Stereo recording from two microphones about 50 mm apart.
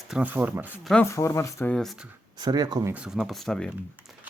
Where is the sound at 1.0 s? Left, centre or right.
Left.